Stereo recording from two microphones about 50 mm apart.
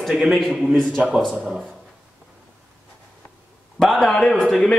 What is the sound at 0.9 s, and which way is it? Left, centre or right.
Speech, right.